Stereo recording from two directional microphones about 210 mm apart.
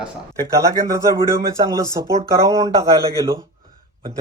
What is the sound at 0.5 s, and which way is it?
Speech, 15° right (ahead or behind).